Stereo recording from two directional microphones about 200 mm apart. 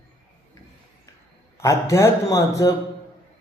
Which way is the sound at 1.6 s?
15° left (ahead or behind).